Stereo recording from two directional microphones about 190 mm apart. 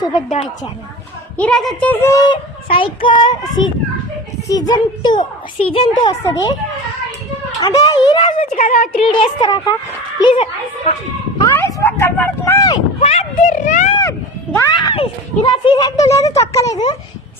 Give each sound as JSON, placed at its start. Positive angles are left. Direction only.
{"t": 1.4, "sound": "speech", "side_deg": 5}
{"t": 7.6, "sound": "speech", "side_deg": 20}
{"t": 8.5, "sound": "a woman's voice", "side_deg": 45}
{"t": 9.0, "sound": "speech", "side_deg": 30}
{"t": 11.3, "sound": "a sound", "side_deg": 15}
{"t": 13.0, "sound": "a sound", "side_deg": 35}
{"t": 13.9, "sound": "speech", "side_deg": 15}